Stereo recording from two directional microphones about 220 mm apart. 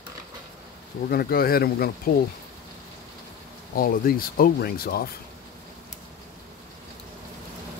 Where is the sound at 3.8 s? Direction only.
40° left (ahead or behind).